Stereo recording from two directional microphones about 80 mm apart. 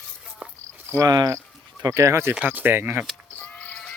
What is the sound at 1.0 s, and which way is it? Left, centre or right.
Speech, right.